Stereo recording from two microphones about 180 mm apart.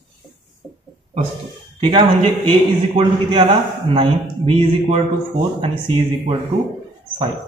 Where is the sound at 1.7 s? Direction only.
30° right (ahead or behind).